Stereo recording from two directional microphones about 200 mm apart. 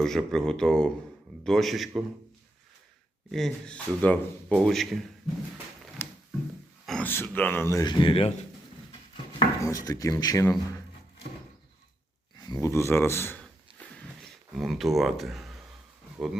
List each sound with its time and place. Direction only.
0.0 s speech: centre (ahead or behind)
3.3 s speech: 5° left (ahead or behind)
6.0 s a sound: 10° left (ahead or behind)
6.8 s speech: 5° left (ahead or behind); by 8.3 s 25° left (ahead or behind)
9.6 s speech: 15° left (ahead or behind)
12.4 s a sound: 15° left (ahead or behind); by 16.4 s centre (ahead or behind)